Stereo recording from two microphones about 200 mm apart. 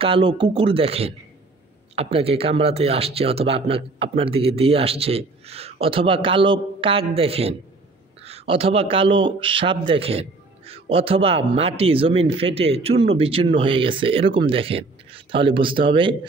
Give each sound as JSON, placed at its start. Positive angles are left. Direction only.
{"t": 0.0, "sound": "a man's voice", "side_deg": -25}